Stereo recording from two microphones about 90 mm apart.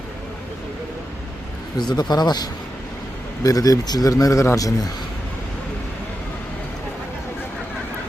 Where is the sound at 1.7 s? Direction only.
55° left (ahead or behind).